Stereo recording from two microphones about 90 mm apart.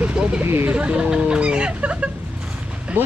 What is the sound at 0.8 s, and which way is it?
Speech, 10° right (ahead or behind).